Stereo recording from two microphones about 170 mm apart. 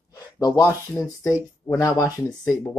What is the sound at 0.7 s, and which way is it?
Speech, 20° left (ahead or behind).